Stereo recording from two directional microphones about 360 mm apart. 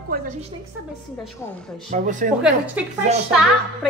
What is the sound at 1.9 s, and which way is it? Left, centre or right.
Speech, right.